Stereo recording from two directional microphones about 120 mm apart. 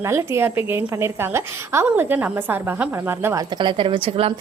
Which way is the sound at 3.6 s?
45° right (ahead or behind).